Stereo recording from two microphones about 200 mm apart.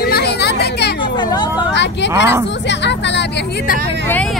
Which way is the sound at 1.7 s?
60° left (ahead or behind).